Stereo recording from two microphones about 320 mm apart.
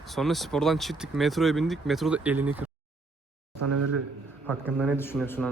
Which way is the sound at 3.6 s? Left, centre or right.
Right.